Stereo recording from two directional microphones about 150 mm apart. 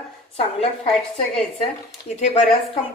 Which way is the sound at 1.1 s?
40° left (ahead or behind).